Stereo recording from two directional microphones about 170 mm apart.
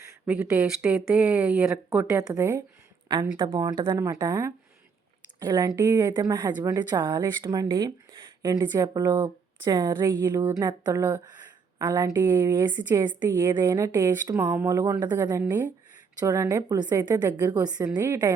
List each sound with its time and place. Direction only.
0.3 s speech: 5° right (ahead or behind)
2.0 s speech: 20° right (ahead or behind)
17.6 s speech: 25° right (ahead or behind)